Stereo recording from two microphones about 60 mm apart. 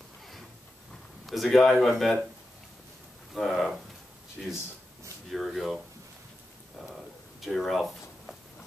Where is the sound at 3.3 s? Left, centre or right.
Centre.